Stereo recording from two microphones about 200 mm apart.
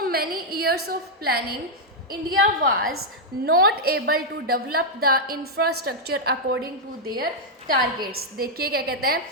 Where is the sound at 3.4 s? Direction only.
50° right (ahead or behind).